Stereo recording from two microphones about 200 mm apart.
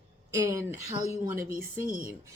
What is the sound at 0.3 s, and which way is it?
Speech, 15° right (ahead or behind).